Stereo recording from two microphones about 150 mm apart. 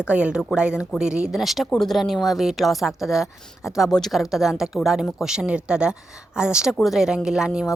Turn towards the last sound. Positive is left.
turn(degrees=-5)  # may be behind; listen again after turning